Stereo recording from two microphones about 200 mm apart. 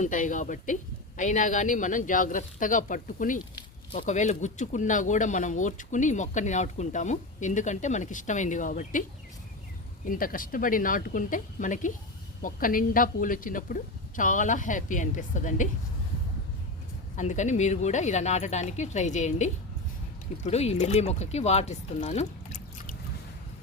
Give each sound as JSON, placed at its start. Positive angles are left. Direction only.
{"t": 0.0, "sound": "speech", "side_deg": 40}
{"t": 10.1, "sound": "speech", "side_deg": 45}
{"t": 17.2, "sound": "speech", "side_deg": 35}